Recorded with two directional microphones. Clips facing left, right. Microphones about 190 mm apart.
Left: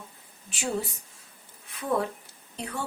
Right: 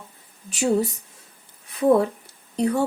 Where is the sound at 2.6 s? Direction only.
40° right (ahead or behind).